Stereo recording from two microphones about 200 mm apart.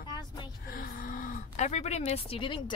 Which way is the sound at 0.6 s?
45° left (ahead or behind).